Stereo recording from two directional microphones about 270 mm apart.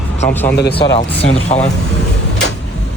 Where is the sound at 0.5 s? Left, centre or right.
Left.